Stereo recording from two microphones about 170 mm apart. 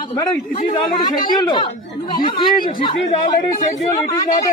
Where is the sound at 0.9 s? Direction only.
25° left (ahead or behind).